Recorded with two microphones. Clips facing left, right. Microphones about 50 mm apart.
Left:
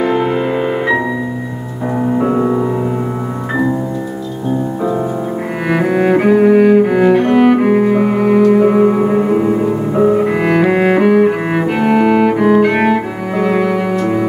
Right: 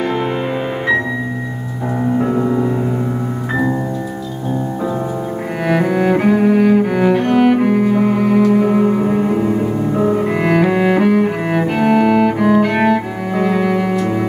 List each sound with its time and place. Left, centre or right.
0.0 s music: centre
2.1 s music: centre
5.7 s cello: centre
7.6 s cello: centre
8.4 s music: centre
8.6 s music: centre
11.0 s cello: centre